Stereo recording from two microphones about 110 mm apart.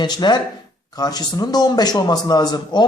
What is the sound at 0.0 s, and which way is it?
A man's voice, 40° left (ahead or behind).